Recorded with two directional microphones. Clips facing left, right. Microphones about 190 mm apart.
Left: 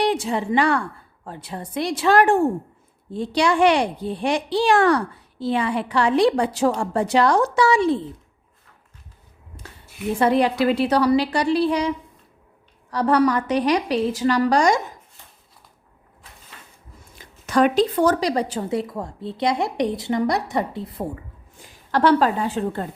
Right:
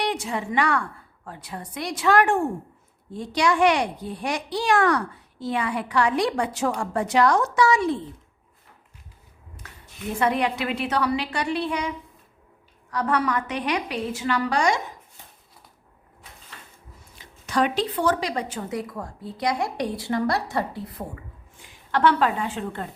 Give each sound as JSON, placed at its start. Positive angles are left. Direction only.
{"t": 0.0, "sound": "a woman's voice", "side_deg": 30}
{"t": 10.2, "sound": "a woman's voice", "side_deg": 35}
{"t": 12.9, "sound": "a woman's voice", "side_deg": 35}
{"t": 17.2, "sound": "a woman's voice", "side_deg": 50}
{"t": 21.6, "sound": "a woman's voice", "side_deg": 35}